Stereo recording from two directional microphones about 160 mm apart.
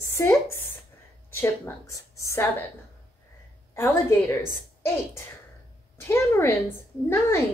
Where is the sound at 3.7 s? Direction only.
15° left (ahead or behind).